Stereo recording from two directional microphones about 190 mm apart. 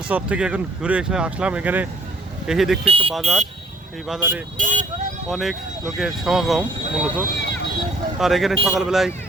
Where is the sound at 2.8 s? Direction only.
30° right (ahead or behind).